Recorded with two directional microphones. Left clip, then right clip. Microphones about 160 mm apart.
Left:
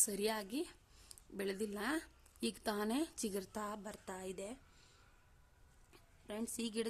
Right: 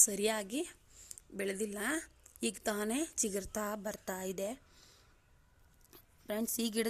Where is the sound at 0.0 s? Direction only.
10° right (ahead or behind).